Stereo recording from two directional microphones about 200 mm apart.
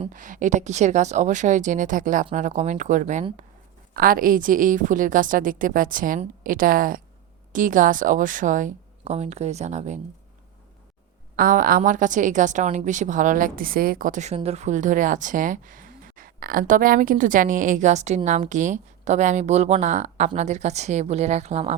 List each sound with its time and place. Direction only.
0.1 s a woman's voice: 40° right (ahead or behind)
11.3 s a woman's voice: 45° right (ahead or behind)